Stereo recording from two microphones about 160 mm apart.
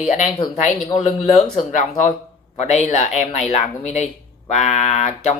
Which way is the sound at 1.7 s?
50° left (ahead or behind).